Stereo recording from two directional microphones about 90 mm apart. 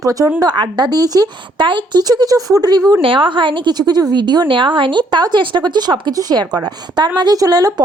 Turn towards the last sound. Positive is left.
turn(degrees=-45)  # may be behind; listen again after turning